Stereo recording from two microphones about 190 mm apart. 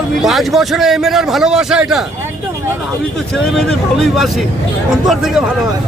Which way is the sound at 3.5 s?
Centre (ahead or behind).